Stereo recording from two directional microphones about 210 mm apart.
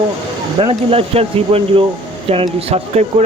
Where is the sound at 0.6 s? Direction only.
25° right (ahead or behind).